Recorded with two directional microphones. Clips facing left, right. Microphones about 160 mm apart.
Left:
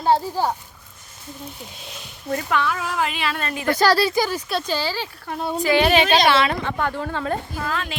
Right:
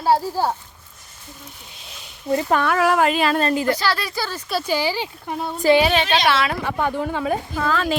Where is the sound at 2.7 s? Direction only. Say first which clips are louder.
Right 10 dB; 70° right (ahead or behind).